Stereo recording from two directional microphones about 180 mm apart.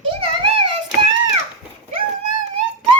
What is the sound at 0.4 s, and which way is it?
Hands, 30° right (ahead or behind).